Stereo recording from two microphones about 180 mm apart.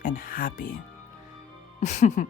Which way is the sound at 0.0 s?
50° left (ahead or behind).